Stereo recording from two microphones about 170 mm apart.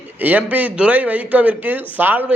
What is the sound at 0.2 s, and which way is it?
A man's voice, 10° right (ahead or behind).